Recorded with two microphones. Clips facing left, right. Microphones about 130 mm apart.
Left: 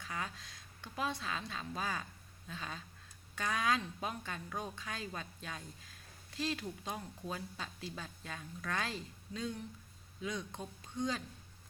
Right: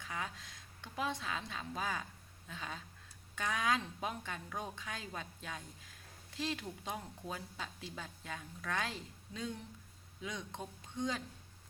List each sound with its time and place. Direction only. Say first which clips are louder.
0.0 s a woman's voice: even; 15° right (ahead or behind)